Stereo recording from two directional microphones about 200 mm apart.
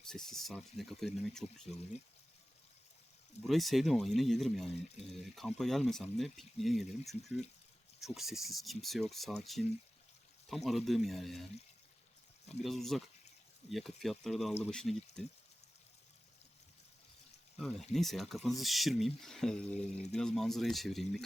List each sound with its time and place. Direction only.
0.1 s speech: centre (ahead or behind)
3.4 s speech: centre (ahead or behind)
12.6 s speech: centre (ahead or behind)
17.9 s speech: centre (ahead or behind)
19.7 s speech: 35° left (ahead or behind)
20.1 s speech: centre (ahead or behind)